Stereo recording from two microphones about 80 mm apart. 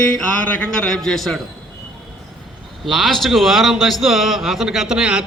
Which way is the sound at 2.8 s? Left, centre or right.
Centre.